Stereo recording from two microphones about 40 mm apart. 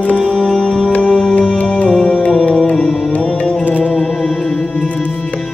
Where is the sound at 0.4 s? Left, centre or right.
Centre.